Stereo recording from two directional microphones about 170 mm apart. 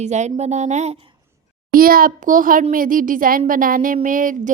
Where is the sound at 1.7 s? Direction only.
60° right (ahead or behind).